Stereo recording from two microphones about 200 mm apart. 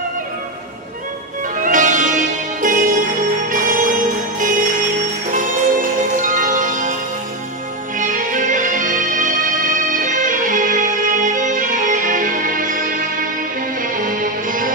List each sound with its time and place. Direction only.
1.6 s music: 40° right (ahead or behind)
8.0 s music: 40° right (ahead or behind)